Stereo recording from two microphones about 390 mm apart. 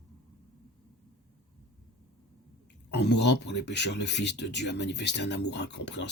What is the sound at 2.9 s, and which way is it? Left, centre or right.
Speech, left.